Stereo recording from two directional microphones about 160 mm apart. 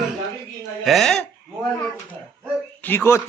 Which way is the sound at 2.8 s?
15° left (ahead or behind).